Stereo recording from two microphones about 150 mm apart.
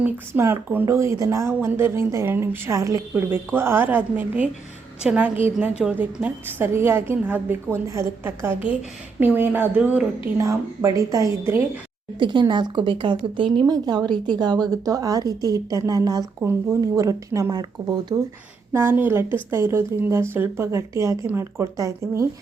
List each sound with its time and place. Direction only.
0.0 s a woman's voice: 15° right (ahead or behind)
10.3 s a woman's voice: 20° right (ahead or behind)
12.2 s a woman's voice: 30° right (ahead or behind)
18.7 s a woman's voice: 15° right (ahead or behind)